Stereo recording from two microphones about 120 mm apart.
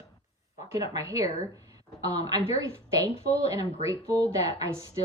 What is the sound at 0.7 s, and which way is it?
A woman's voice, 25° right (ahead or behind).